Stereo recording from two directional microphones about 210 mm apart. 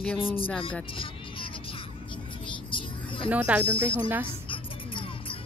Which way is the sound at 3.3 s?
5° right (ahead or behind).